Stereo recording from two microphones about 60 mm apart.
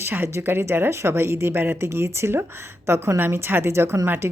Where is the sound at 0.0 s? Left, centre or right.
Right.